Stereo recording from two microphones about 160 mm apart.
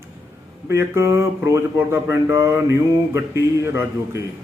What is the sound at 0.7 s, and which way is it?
A man's voice, 15° right (ahead or behind).